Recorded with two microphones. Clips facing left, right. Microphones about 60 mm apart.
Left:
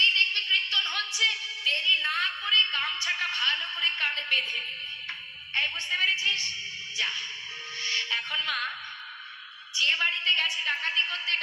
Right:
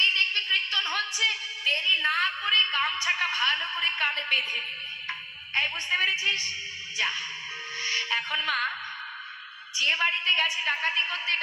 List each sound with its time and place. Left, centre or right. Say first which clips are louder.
0.0 s a woman's voice: even; right
7.8 s music: right 2 dB; right
9.8 s a woman's voice: right 1 dB; right